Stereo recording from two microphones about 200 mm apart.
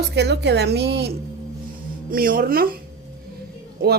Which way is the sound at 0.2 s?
55° right (ahead or behind).